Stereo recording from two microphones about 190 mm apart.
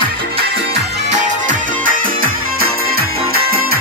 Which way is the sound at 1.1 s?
45° right (ahead or behind).